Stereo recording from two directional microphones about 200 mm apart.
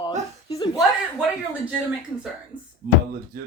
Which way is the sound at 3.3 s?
50° right (ahead or behind).